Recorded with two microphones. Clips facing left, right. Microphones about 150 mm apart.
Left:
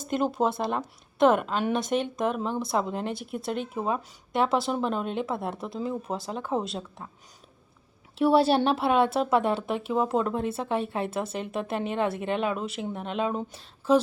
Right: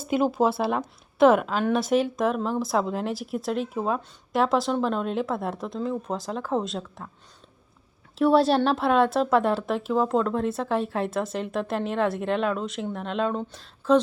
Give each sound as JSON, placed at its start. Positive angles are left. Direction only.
{"t": 0.0, "sound": "a woman's voice", "side_deg": -5}
{"t": 8.2, "sound": "a woman's voice", "side_deg": 5}